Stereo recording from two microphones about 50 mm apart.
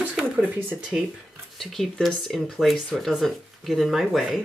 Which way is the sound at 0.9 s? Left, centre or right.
Right.